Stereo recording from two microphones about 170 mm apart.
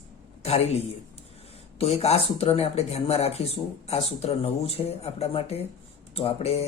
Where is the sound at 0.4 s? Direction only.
35° left (ahead or behind).